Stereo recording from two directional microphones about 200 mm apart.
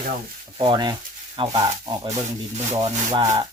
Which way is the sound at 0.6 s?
20° right (ahead or behind).